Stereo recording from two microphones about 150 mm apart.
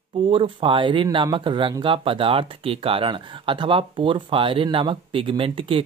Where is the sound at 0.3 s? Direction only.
35° right (ahead or behind).